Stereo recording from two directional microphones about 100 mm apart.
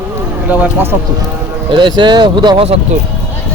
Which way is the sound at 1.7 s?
50° right (ahead or behind).